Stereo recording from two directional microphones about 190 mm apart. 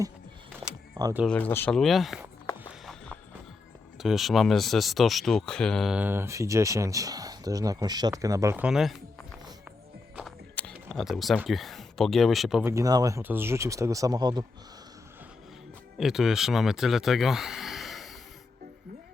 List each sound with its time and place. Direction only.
1.0 s speech: 20° right (ahead or behind)
1.3 s speech: 10° left (ahead or behind)
2.8 s music: centre (ahead or behind)
3.9 s speech: centre (ahead or behind)
10.5 s speech: 5° left (ahead or behind)
12.7 s speech: 20° right (ahead or behind)
16.0 s speech: centre (ahead or behind)